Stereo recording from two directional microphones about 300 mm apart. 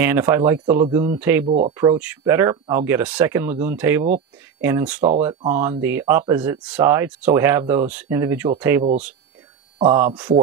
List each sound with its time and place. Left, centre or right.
0.0 s speech: centre
1.4 s speech: right
1.7 s speech: centre